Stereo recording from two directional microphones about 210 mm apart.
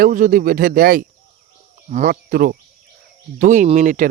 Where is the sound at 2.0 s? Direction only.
45° right (ahead or behind).